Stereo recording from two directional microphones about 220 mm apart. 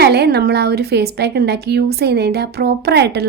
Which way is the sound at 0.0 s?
50° right (ahead or behind).